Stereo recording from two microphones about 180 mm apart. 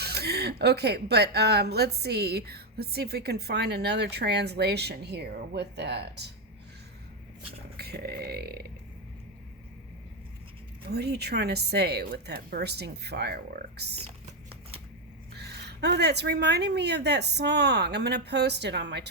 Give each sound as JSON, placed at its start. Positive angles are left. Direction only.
{"t": 0.0, "sound": "speech", "side_deg": -65}
{"t": 7.8, "sound": "speech", "side_deg": -60}
{"t": 10.8, "sound": "speech", "side_deg": -65}
{"t": 15.4, "sound": "a woman's voice", "side_deg": -65}